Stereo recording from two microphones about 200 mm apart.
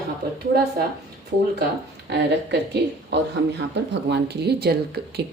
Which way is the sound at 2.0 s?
55° right (ahead or behind).